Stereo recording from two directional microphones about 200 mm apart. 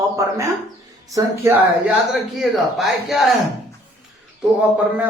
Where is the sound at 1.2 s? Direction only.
10° right (ahead or behind).